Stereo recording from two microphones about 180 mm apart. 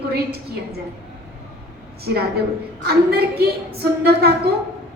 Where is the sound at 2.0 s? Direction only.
60° right (ahead or behind).